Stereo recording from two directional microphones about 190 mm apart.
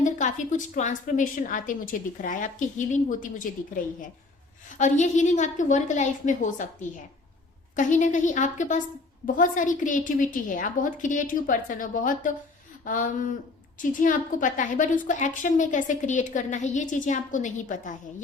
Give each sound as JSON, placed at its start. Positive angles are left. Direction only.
{"t": 0.0, "sound": "a woman's voice", "side_deg": 40}
{"t": 7.8, "sound": "a woman's voice", "side_deg": 40}